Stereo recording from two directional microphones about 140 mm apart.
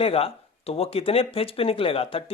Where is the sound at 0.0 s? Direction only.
45° left (ahead or behind).